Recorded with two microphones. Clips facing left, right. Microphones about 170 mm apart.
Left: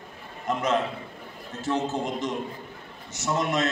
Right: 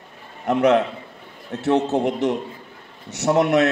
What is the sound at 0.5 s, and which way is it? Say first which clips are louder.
A man's voice: right 8 dB; 65° right (ahead or behind).